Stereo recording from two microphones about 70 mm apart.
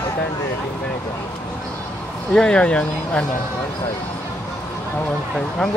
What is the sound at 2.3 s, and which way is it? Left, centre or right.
Speech, centre.